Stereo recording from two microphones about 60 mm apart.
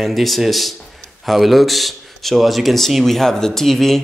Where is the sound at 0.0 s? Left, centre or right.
Centre.